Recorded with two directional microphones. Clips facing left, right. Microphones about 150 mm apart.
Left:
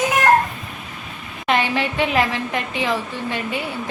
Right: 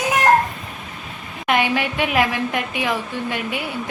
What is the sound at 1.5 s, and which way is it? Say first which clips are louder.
A woman's voice: even; 10° right (ahead or behind).